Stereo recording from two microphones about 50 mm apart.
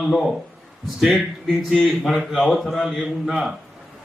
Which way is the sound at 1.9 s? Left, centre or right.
Centre.